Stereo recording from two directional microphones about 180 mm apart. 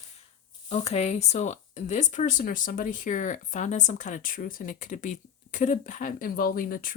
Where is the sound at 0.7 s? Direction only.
35° left (ahead or behind).